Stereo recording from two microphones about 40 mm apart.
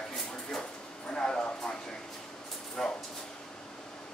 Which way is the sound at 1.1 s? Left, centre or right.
Centre.